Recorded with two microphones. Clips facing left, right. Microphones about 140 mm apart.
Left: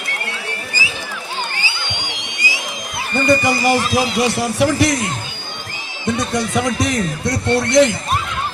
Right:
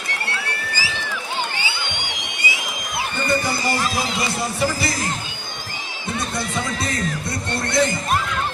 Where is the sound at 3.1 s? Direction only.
90° left.